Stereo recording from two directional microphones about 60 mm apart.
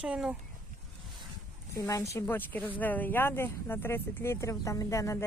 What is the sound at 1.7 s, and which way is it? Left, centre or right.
Speech, left.